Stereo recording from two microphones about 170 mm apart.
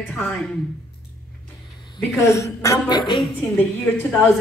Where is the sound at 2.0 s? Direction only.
15° left (ahead or behind).